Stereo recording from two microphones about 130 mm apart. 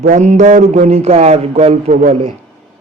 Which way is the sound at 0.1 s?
65° right (ahead or behind).